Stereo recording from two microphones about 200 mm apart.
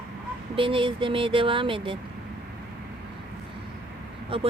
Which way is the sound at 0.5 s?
25° right (ahead or behind).